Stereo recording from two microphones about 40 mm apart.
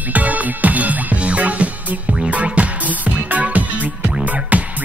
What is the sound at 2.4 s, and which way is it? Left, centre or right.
Music, right.